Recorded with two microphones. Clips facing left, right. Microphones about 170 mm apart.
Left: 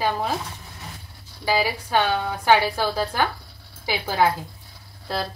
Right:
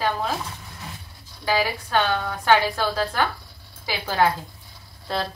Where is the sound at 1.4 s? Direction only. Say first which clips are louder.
Left 1 dB; 10° left (ahead or behind).